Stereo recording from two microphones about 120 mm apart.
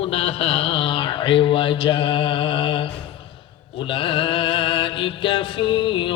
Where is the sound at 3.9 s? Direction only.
45° left (ahead or behind).